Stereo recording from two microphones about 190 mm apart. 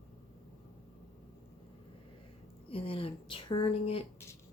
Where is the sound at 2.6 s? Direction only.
30° left (ahead or behind).